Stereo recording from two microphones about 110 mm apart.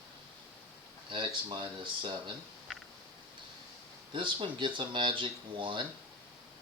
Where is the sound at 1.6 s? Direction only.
50° right (ahead or behind).